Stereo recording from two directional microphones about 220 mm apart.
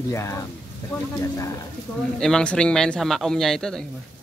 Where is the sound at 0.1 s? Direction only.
15° left (ahead or behind).